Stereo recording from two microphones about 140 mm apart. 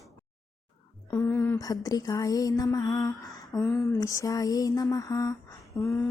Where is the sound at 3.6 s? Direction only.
15° left (ahead or behind).